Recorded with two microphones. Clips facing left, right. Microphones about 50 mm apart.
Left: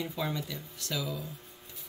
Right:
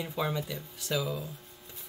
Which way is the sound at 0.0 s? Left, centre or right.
Centre.